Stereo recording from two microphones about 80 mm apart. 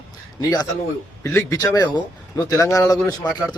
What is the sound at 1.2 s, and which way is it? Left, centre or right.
Speech, left.